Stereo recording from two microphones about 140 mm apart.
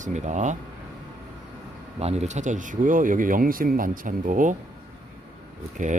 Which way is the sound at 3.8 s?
70° right (ahead or behind).